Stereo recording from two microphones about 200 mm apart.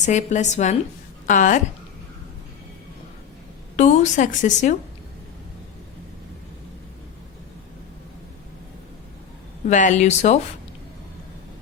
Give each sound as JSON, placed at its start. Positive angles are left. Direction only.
{"t": 0.0, "sound": "a woman's voice", "side_deg": 35}
{"t": 3.8, "sound": "a woman's voice", "side_deg": 35}
{"t": 9.6, "sound": "a woman's voice", "side_deg": 35}